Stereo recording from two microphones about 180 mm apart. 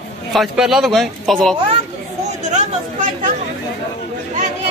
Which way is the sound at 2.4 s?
40° right (ahead or behind).